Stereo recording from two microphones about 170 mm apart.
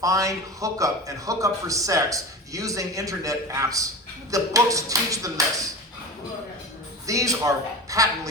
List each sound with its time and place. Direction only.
0.0 s a man's voice: 20° right (ahead or behind)
7.1 s a man's voice: 20° right (ahead or behind)